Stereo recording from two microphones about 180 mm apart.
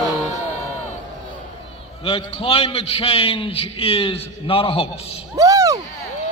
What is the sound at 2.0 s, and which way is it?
A man's voice, 30° left (ahead or behind).